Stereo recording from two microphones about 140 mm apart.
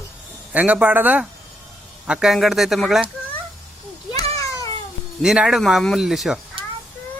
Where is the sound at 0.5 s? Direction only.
10° right (ahead or behind).